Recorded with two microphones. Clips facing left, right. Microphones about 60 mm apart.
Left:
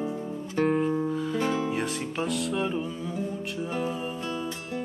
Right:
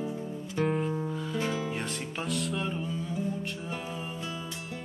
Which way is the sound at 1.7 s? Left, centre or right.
Centre.